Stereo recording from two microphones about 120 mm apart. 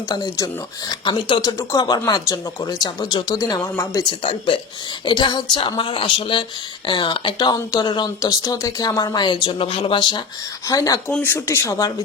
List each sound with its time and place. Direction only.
0.1 s speech: 35° left (ahead or behind)
4.2 s speech: 45° left (ahead or behind); by 11.0 s 30° left (ahead or behind)
11.1 s speech: 15° left (ahead or behind)